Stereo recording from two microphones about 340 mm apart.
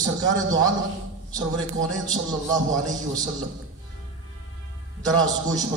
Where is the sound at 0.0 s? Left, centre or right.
Centre.